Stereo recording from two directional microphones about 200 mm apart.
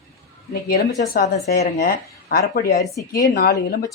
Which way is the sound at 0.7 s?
45° left (ahead or behind).